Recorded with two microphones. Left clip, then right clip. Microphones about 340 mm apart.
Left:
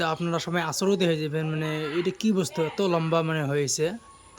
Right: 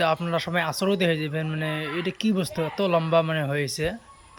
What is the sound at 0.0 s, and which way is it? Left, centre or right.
Speech, centre.